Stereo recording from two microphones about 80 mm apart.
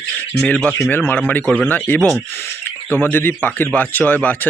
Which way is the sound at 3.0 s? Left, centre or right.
Left.